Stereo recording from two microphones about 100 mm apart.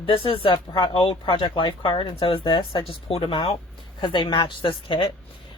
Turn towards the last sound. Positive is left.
turn(degrees=55)  # may be behind; listen again after turning